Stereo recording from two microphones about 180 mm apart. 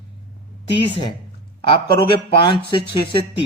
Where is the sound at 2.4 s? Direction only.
25° left (ahead or behind).